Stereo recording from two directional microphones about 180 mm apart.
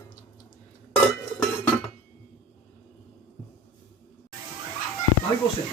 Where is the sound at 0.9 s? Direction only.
5° left (ahead or behind).